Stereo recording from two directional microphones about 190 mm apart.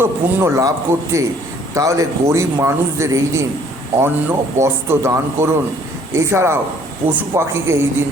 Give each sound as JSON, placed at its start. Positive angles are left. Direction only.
{"t": 0.0, "sound": "a man's voice", "side_deg": -15}